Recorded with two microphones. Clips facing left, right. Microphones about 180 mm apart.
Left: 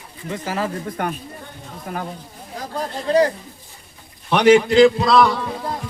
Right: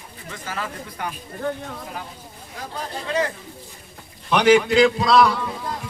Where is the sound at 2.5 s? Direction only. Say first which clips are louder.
Left 5 dB; 40° left (ahead or behind).